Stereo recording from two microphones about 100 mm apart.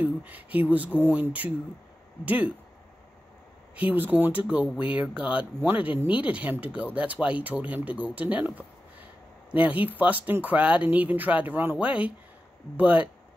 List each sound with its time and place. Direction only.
0.0 s a sound: 15° right (ahead or behind)
0.7 s speech: 15° right (ahead or behind)
3.7 s speech: 15° right (ahead or behind)